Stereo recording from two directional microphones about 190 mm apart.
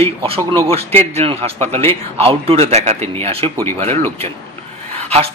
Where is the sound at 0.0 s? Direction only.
30° right (ahead or behind).